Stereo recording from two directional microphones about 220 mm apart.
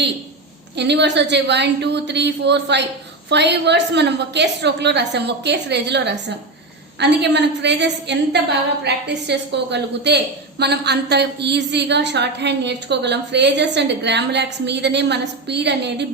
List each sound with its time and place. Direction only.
0.8 s a woman's voice: 50° right (ahead or behind)